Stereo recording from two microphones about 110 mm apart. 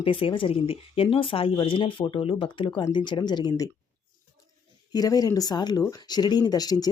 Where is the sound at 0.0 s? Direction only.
50° left (ahead or behind).